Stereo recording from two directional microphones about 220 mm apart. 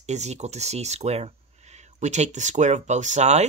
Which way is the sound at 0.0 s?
30° right (ahead or behind).